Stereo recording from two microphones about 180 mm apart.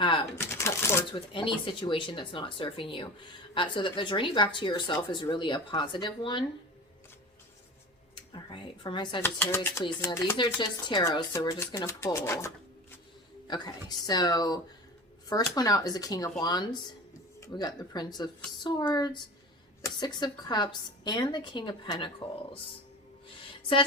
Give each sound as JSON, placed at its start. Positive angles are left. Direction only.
{"t": 0.0, "sound": "a sound", "side_deg": 25}
{"t": 0.3, "sound": "speech", "side_deg": 15}
{"t": 1.1, "sound": "speech", "side_deg": 30}
{"t": 8.1, "sound": "speech", "side_deg": 25}
{"t": 9.2, "sound": "speech", "side_deg": 10}
{"t": 13.5, "sound": "speech", "side_deg": 25}
{"t": 23.5, "sound": "a sound", "side_deg": 30}